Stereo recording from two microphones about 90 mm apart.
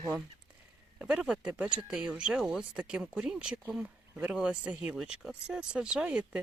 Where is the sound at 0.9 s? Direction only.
10° right (ahead or behind).